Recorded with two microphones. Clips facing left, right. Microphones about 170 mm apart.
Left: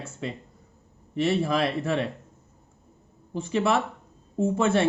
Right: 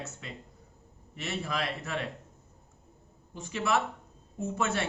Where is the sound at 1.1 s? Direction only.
30° left (ahead or behind).